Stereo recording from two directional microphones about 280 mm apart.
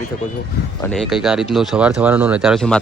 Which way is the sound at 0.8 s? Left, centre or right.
Centre.